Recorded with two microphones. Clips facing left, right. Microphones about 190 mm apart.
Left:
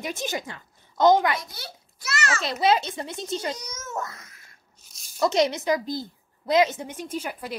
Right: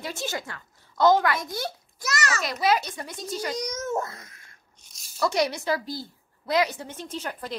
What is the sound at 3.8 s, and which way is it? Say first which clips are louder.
Babbling: right 5 dB; 25° right (ahead or behind).